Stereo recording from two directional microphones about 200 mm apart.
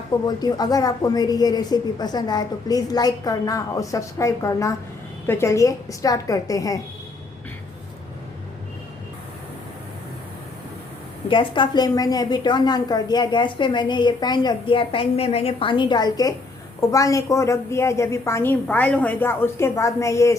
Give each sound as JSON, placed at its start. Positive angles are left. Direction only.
{"t": 0.3, "sound": "a woman's voice", "side_deg": 20}
{"t": 11.3, "sound": "a woman's voice", "side_deg": 25}